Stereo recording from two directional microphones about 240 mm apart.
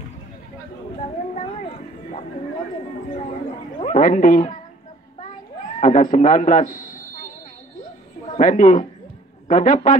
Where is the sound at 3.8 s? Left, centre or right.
Left.